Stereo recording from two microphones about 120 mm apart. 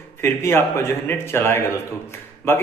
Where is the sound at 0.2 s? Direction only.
20° left (ahead or behind).